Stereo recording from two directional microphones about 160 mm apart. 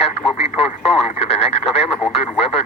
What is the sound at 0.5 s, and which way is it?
Speech, 40° left (ahead or behind).